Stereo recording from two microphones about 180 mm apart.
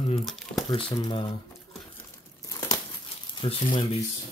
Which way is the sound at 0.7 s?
25° left (ahead or behind).